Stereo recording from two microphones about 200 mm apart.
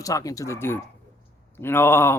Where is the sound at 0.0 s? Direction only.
15° left (ahead or behind).